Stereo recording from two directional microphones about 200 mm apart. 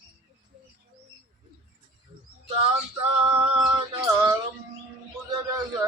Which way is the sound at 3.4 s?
25° right (ahead or behind).